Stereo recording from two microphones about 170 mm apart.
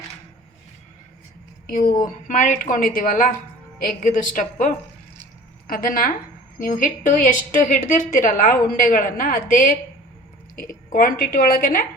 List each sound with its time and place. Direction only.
1.6 s a woman's voice: 55° left (ahead or behind)